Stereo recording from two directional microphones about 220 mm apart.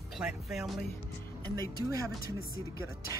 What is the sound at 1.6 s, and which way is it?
Speech, 15° right (ahead or behind).